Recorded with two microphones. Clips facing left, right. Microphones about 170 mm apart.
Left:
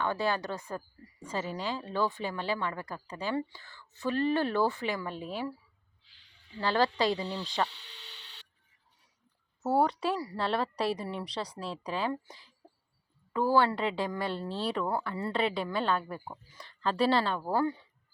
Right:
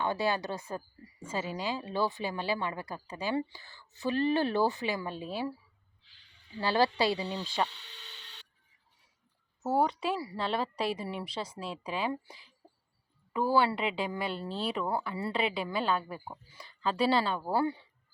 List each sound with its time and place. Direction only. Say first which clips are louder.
0.0 s speech: even; 15° right (ahead or behind)
6.6 s speech: even; 10° right (ahead or behind)
9.6 s speech: left 1 dB; centre (ahead or behind)